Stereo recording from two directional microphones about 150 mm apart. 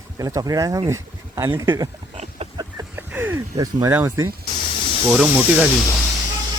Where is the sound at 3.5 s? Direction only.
20° right (ahead or behind).